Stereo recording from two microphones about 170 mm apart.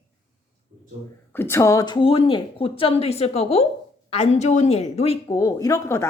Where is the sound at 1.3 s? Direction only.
15° left (ahead or behind).